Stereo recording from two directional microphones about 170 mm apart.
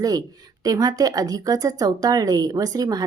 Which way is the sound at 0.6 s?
20° right (ahead or behind).